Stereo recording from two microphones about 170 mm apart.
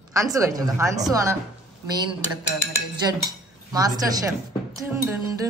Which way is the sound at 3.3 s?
20° right (ahead or behind).